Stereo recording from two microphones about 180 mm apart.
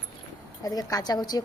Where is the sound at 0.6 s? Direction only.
20° left (ahead or behind).